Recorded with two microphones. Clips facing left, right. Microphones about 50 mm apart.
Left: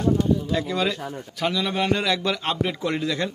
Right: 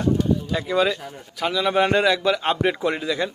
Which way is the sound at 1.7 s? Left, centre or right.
Right.